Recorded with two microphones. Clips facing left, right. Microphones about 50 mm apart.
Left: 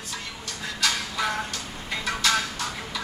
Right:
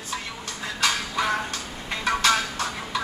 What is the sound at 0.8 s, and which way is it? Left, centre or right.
Music, centre.